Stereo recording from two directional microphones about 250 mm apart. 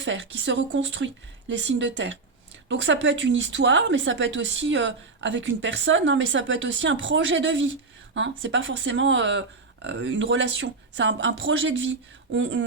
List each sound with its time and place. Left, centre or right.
0.0 s speech: right